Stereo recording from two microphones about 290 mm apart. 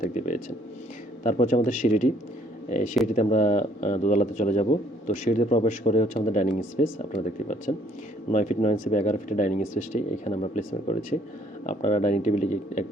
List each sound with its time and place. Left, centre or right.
0.0 s speech: left